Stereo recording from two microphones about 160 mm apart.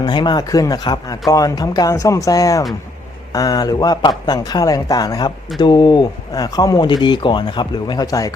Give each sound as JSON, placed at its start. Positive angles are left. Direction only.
{"t": 0.0, "sound": "speech", "side_deg": 30}